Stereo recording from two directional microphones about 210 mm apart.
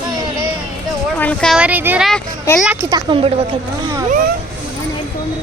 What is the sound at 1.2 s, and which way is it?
Speech, 5° left (ahead or behind).